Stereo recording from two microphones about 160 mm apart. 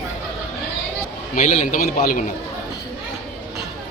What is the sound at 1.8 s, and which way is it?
Speech, 60° left (ahead or behind).